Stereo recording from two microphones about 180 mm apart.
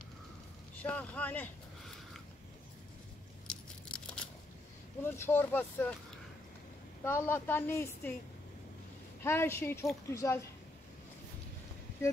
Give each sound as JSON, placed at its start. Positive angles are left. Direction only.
{"t": 0.8, "sound": "a woman's voice", "side_deg": 10}
{"t": 3.4, "sound": "a sound", "side_deg": 5}
{"t": 5.0, "sound": "a woman's voice", "side_deg": 15}
{"t": 7.1, "sound": "a woman's voice", "side_deg": 15}
{"t": 9.2, "sound": "a woman's voice", "side_deg": 15}